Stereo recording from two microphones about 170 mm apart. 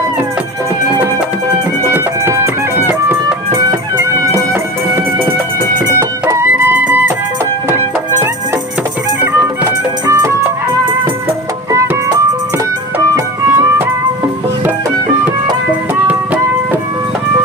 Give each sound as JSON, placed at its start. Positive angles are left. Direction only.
{"t": 1.9, "sound": "music", "side_deg": -15}
{"t": 5.8, "sound": "music", "side_deg": -15}
{"t": 9.2, "sound": "music", "side_deg": -15}
{"t": 11.7, "sound": "music", "side_deg": -20}